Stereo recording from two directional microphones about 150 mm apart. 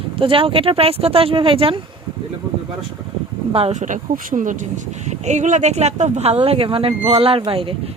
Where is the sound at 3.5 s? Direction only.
40° right (ahead or behind).